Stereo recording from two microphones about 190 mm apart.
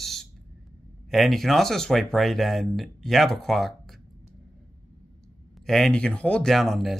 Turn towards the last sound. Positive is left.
turn(degrees=0)  # may be behind; listen again after turning